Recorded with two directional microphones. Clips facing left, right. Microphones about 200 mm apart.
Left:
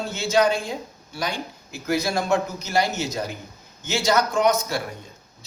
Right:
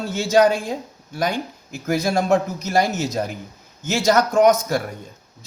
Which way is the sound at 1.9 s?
50° right (ahead or behind).